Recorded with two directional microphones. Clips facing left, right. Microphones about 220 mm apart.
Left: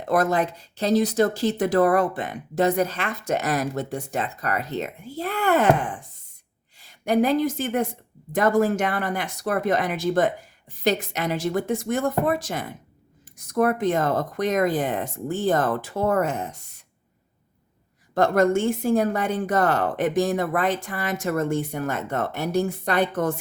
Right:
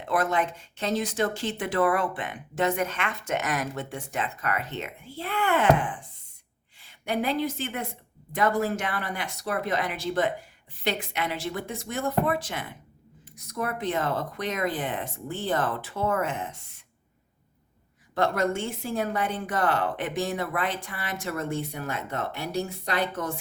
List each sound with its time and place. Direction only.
0.1 s a woman's voice: 40° left (ahead or behind)
18.1 s a woman's voice: 45° left (ahead or behind)